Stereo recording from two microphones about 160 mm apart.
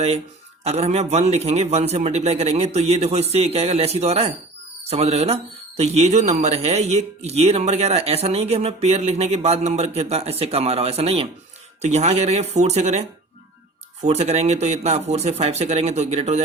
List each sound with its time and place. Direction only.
0.6 s a man's voice: 40° right (ahead or behind)